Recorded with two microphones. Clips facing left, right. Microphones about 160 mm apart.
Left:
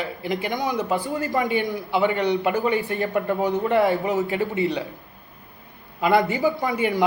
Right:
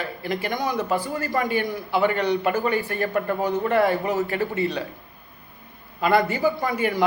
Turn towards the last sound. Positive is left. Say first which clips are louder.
# left 1 dB
turn(degrees=20)  # may be behind; listen again after turning